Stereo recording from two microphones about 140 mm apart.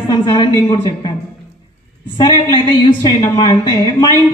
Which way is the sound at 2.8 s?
30° left (ahead or behind).